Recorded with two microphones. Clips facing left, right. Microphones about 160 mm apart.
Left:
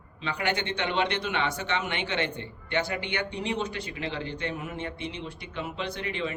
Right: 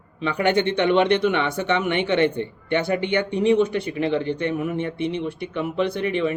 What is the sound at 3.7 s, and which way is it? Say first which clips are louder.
Speech: right 11 dB; 55° right (ahead or behind).